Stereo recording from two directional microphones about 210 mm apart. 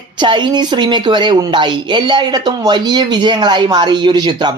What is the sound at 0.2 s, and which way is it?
A woman's voice, 20° right (ahead or behind).